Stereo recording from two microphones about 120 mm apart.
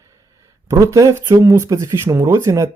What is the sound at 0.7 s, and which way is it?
Speech, 25° right (ahead or behind).